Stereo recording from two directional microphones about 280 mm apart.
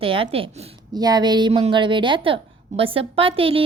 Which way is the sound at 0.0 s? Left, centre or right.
Centre.